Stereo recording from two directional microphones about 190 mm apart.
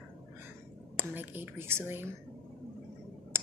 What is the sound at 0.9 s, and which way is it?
A woman's voice, 10° right (ahead or behind).